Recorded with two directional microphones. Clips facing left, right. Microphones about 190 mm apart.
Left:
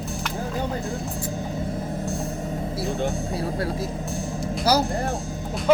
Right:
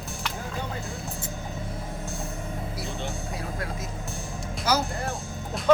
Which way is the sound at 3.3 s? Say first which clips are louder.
Left 7 dB; 30° left (ahead or behind).